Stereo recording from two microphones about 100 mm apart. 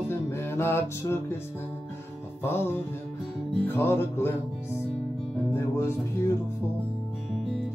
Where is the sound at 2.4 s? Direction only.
25° left (ahead or behind).